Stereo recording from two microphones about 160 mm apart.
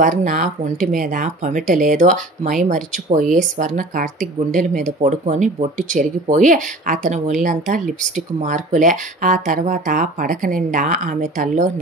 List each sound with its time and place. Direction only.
0.0 s speech: 55° right (ahead or behind)